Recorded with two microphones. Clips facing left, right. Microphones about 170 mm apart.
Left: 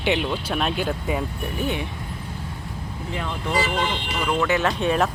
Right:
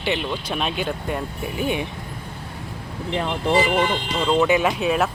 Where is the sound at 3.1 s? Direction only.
25° right (ahead or behind).